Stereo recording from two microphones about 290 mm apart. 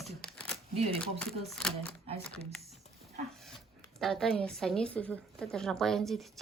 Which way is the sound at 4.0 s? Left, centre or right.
Centre.